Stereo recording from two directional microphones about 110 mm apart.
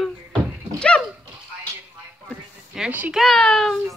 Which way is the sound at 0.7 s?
10° left (ahead or behind).